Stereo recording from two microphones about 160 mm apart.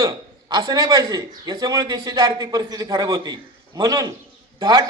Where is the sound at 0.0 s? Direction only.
25° right (ahead or behind).